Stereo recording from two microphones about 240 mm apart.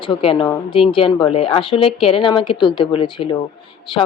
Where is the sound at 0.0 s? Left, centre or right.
Left.